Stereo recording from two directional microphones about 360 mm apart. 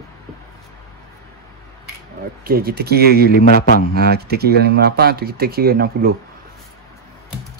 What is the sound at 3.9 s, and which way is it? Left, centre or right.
Speech, right.